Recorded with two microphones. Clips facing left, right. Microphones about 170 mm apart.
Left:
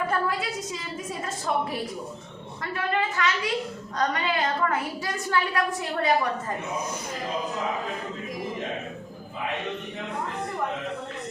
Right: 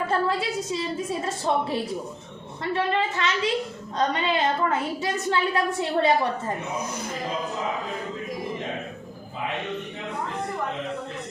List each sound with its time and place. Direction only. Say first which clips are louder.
0.1 s a woman's voice: right 3 dB; 30° right (ahead or behind)